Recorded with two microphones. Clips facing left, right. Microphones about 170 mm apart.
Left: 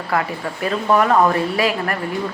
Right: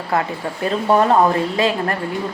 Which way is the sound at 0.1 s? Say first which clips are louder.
Right 1 dB; 30° right (ahead or behind).